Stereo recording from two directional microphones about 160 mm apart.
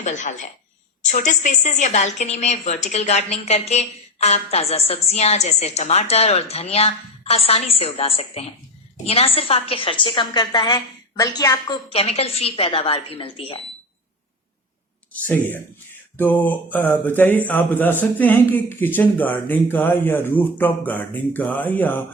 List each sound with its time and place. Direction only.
0.0 s a woman's voice: 50° left (ahead or behind); by 11.8 s 25° left (ahead or behind)
11.9 s speech: 40° left (ahead or behind)
15.5 s speech: 10° left (ahead or behind)